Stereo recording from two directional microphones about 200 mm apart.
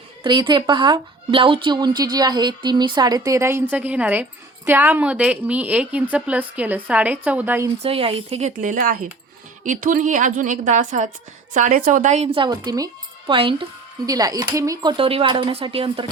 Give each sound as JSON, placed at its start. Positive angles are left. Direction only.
{"t": 0.2, "sound": "a woman's voice", "side_deg": -25}
{"t": 7.8, "sound": "a woman's voice", "side_deg": -30}